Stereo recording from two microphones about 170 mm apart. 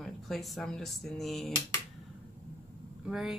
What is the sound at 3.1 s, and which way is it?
Speech, 5° right (ahead or behind).